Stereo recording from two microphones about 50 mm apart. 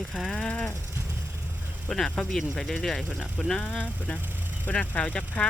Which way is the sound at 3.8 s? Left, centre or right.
Left.